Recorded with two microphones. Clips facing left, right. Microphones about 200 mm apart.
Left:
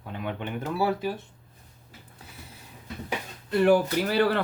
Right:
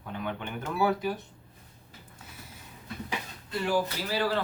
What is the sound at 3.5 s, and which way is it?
Speech, 60° left (ahead or behind).